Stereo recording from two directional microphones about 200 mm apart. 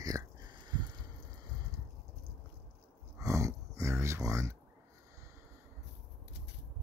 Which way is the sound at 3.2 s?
15° right (ahead or behind).